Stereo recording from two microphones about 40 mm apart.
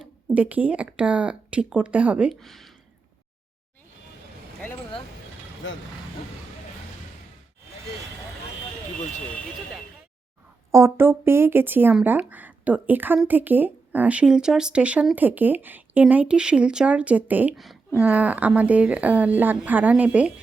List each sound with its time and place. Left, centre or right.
0.3 s a woman's voice: right
2.3 s speech: centre
10.8 s speech: right
12.3 s a woman's voice: right
14.3 s speech: centre
14.8 s a woman's voice: right
15.1 s speech: right
16.2 s a woman's voice: right